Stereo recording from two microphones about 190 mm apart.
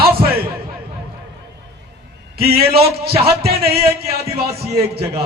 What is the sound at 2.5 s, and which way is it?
Speech, 55° right (ahead or behind).